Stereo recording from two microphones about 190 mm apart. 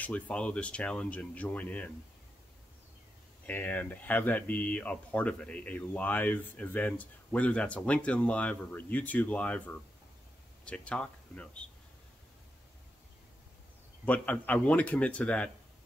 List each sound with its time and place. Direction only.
0.0 s speech: 5° left (ahead or behind)
3.4 s speech: 10° left (ahead or behind)
10.6 s speech: 5° left (ahead or behind)
14.0 s speech: 10° left (ahead or behind)